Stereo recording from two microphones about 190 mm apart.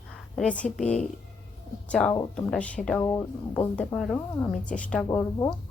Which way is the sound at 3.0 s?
15° left (ahead or behind).